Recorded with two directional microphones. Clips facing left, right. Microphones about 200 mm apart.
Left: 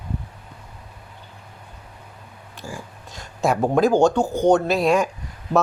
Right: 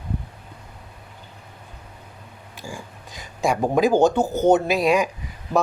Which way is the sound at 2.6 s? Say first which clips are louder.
Left 1 dB; centre (ahead or behind).